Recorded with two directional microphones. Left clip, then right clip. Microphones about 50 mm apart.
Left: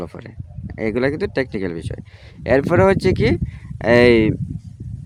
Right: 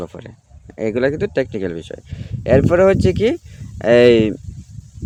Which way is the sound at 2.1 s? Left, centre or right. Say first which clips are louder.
Right 2 dB; left.